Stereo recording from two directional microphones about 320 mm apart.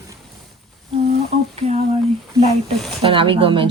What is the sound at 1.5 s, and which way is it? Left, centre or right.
Speech, centre.